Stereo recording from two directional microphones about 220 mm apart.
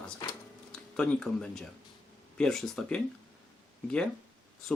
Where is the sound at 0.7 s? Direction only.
5° left (ahead or behind).